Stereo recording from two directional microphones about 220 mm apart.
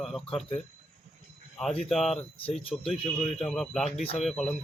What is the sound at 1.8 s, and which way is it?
Speech, centre (ahead or behind).